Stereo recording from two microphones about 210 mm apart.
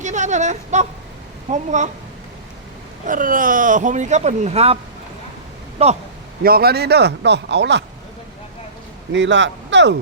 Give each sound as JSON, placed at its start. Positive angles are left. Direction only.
{"t": 0.0, "sound": "speech", "side_deg": -35}
{"t": 3.1, "sound": "speech", "side_deg": -40}
{"t": 5.8, "sound": "a man's voice", "side_deg": -30}
{"t": 6.4, "sound": "speech", "side_deg": -45}
{"t": 9.1, "sound": "speech", "side_deg": -60}